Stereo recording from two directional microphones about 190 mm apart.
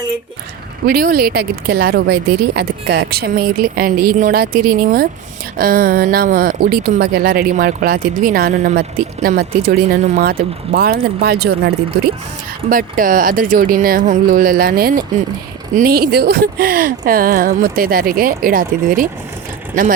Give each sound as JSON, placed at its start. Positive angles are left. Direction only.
{"t": 0.9, "sound": "speech", "side_deg": -50}